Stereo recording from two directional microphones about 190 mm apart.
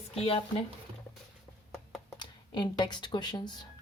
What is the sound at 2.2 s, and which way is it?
Speech, 25° left (ahead or behind).